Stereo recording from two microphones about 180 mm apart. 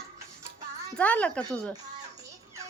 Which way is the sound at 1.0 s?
10° left (ahead or behind).